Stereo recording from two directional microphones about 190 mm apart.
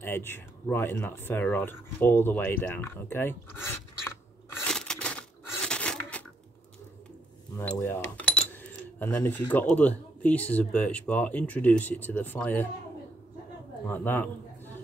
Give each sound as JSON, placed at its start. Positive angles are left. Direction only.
{"t": 0.0, "sound": "speech", "side_deg": 10}
{"t": 4.6, "sound": "crushing", "side_deg": 5}
{"t": 5.7, "sound": "filing", "side_deg": 5}
{"t": 7.7, "sound": "speech", "side_deg": 10}
{"t": 13.8, "sound": "speech", "side_deg": 10}